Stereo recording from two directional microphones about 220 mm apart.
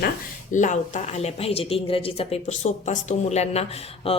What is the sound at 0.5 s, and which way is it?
A woman's voice, 35° left (ahead or behind).